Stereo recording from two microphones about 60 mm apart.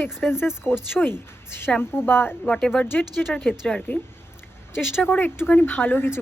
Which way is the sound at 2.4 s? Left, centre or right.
Centre.